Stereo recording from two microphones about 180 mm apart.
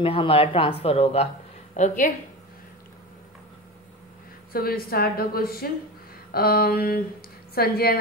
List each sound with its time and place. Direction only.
0.0 s speech: 30° left (ahead or behind)
1.8 s speech: 45° left (ahead or behind)
4.5 s speech: 55° left (ahead or behind)